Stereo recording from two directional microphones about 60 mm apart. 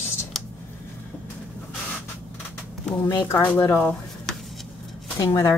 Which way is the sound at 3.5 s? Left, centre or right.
Left.